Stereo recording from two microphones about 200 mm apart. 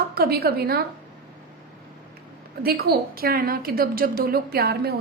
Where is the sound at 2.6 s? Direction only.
50° right (ahead or behind).